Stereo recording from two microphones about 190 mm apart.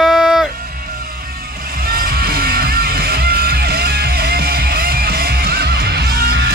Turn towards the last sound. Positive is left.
turn(degrees=-55)  # may be behind; listen again after turning